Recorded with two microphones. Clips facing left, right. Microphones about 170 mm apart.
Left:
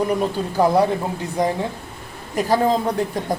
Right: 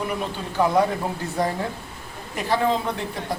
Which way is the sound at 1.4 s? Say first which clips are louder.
Left 4 dB; 20° left (ahead or behind).